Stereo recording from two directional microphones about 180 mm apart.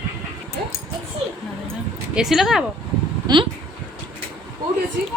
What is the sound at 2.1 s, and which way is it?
Speech, centre (ahead or behind).